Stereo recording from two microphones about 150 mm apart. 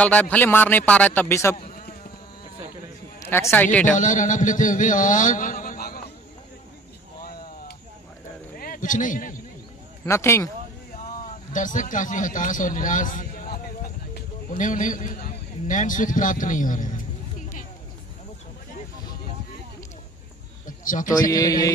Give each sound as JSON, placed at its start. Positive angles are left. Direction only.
{"t": 0.0, "sound": "a man's voice", "side_deg": 10}
{"t": 3.3, "sound": "a man's voice", "side_deg": 15}
{"t": 3.9, "sound": "a man's voice", "side_deg": 60}
{"t": 8.5, "sound": "speech", "side_deg": 70}
{"t": 10.0, "sound": "mantra", "side_deg": 20}
{"t": 11.5, "sound": "a man's voice", "side_deg": 60}
{"t": 20.6, "sound": "a sound", "side_deg": 60}
{"t": 21.3, "sound": "mantra", "side_deg": 25}